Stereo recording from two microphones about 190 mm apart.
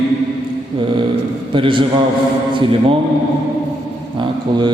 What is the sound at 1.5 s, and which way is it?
A man's voice, 25° right (ahead or behind).